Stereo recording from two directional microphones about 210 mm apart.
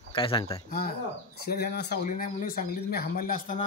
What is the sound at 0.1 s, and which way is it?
Speech, 25° left (ahead or behind).